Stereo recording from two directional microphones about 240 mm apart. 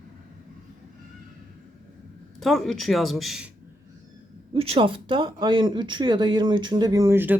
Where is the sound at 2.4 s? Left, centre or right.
Centre.